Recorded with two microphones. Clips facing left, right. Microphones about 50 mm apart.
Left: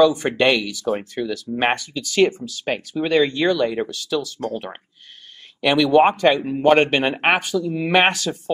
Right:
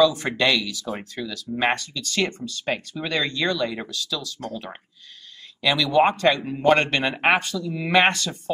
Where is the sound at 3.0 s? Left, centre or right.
Left.